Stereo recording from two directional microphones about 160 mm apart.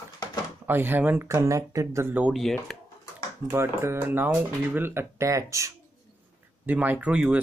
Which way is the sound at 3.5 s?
15° right (ahead or behind).